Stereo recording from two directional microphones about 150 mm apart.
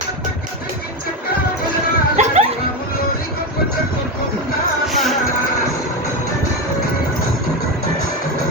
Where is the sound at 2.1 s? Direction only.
50° right (ahead or behind).